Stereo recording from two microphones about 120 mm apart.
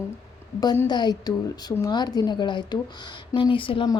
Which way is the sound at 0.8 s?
35° left (ahead or behind).